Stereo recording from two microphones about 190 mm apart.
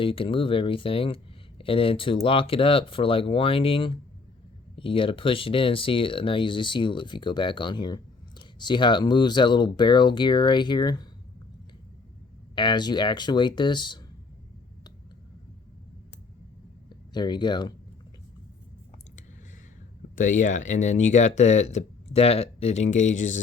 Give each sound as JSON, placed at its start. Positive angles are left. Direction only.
{"t": 0.0, "sound": "speech", "side_deg": 30}
{"t": 12.5, "sound": "speech", "side_deg": 25}
{"t": 16.9, "sound": "speech", "side_deg": 25}
{"t": 20.1, "sound": "speech", "side_deg": 40}